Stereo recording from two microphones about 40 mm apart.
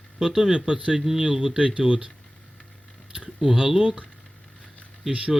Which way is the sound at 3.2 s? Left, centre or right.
Centre.